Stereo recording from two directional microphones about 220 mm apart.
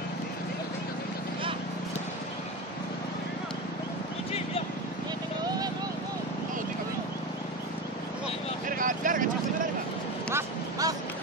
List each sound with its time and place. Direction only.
8.6 s vehicle: 35° right (ahead or behind)
10.3 s vehicle: 15° right (ahead or behind)